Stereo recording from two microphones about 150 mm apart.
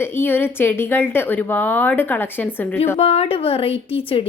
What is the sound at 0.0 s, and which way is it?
A woman's voice, 15° left (ahead or behind).